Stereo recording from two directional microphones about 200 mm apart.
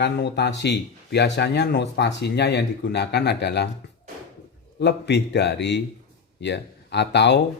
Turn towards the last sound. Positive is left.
turn(degrees=60)  # may be behind; listen again after turning